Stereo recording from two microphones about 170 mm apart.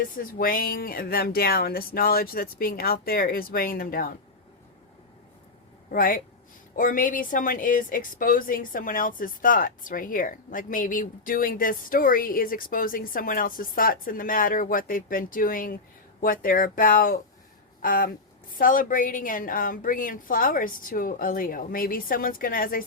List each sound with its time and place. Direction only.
0.0 s a woman's voice: 55° left (ahead or behind)
5.9 s a woman's voice: 55° left (ahead or behind)